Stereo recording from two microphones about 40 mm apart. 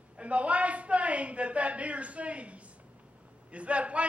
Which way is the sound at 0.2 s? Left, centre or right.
Right.